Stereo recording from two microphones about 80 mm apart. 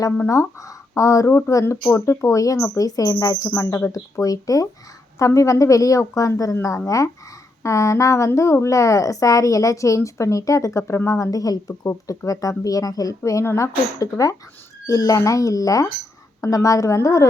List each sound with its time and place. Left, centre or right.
0.3 s speech: left
3.9 s speech: left
13.4 s speech: left
14.0 s speech: left